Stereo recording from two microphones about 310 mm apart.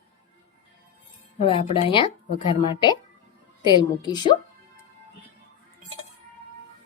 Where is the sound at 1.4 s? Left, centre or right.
Centre.